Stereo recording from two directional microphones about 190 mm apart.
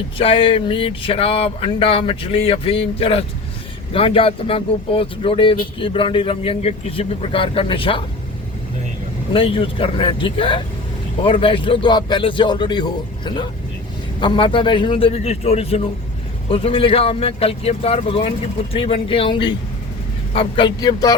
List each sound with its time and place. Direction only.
0.2 s speech: 30° left (ahead or behind)
9.3 s speech: 30° left (ahead or behind)